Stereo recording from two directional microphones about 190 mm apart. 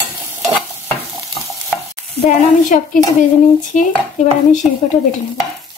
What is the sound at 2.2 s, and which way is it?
A woman's voice, 45° left (ahead or behind).